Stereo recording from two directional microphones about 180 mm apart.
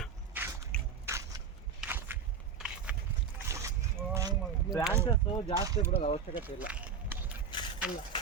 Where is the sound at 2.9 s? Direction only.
5° right (ahead or behind).